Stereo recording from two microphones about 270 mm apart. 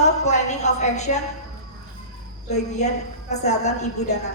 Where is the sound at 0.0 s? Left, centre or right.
Left.